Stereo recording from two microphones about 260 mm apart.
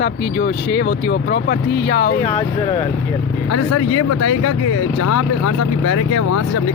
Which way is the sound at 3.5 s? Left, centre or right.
Left.